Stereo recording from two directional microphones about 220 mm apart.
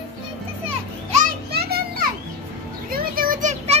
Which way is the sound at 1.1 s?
40° right (ahead or behind).